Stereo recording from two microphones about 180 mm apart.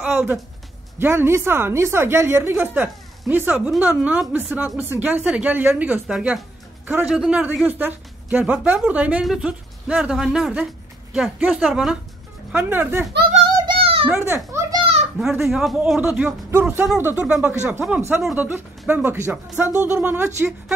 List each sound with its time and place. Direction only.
0.0 s a woman's voice: 5° right (ahead or behind)
13.7 s a sound: 30° right (ahead or behind)
14.0 s a child's voice: 10° right (ahead or behind)
15.1 s a woman's voice: centre (ahead or behind)